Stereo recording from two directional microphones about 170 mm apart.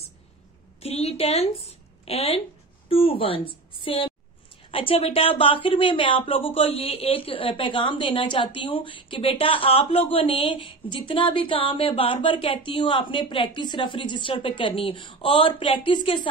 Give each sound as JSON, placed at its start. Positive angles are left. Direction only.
{"t": 0.7, "sound": "a woman's voice", "side_deg": 35}